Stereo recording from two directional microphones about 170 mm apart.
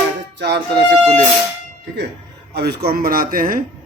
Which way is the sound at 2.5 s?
75° right (ahead or behind).